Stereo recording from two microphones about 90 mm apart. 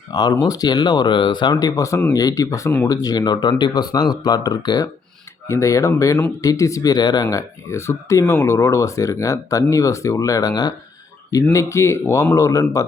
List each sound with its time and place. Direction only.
0.1 s speech: 50° left (ahead or behind)
5.5 s speech: 35° left (ahead or behind)
11.5 s speech: 30° left (ahead or behind)